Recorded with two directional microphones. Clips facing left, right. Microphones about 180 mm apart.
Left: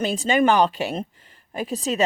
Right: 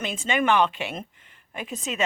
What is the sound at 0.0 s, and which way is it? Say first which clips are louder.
Speech: left 6 dB; 35° left (ahead or behind).